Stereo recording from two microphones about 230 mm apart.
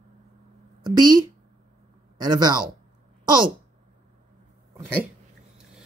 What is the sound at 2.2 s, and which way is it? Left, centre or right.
Speech, centre.